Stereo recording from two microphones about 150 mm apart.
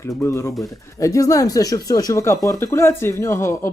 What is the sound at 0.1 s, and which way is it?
Speech, 20° left (ahead or behind).